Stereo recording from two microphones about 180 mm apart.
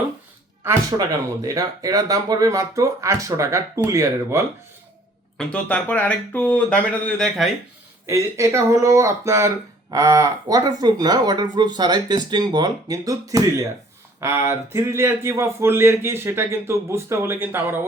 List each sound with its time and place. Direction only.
0.6 s speech: 15° right (ahead or behind)
5.4 s speech: 5° left (ahead or behind)
8.0 s speech: 15° right (ahead or behind)